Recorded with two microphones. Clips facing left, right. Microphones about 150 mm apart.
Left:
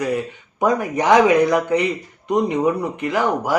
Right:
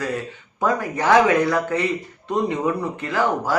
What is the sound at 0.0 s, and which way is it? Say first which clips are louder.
Mantra: left 4 dB; 15° left (ahead or behind).